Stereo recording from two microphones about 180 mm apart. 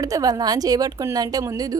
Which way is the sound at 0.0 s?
20° right (ahead or behind).